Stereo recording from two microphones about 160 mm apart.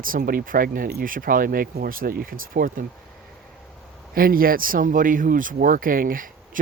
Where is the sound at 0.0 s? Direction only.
60° right (ahead or behind).